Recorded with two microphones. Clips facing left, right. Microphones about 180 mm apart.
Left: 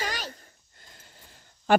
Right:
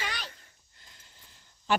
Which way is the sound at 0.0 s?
40° left (ahead or behind).